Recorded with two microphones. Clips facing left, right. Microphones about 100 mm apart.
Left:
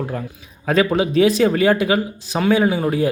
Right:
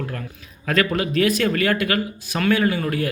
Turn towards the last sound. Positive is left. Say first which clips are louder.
# left 4 dB
turn(degrees=20)  # may be behind; listen again after turning